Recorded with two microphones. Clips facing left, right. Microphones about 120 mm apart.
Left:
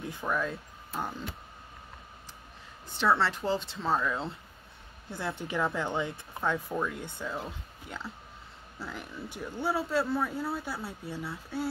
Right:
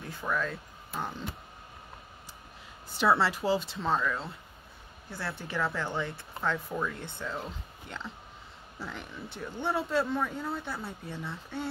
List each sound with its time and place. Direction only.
0.1 s speech: 15° left (ahead or behind)
3.0 s speech: 5° right (ahead or behind)
4.0 s speech: 15° left (ahead or behind)